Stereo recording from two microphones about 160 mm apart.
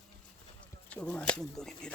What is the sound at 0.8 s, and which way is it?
Speech, 10° left (ahead or behind).